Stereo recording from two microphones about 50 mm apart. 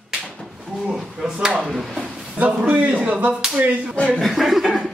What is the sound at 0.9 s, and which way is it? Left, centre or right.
Speech, centre.